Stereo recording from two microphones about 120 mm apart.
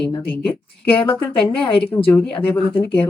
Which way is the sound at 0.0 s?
15° left (ahead or behind).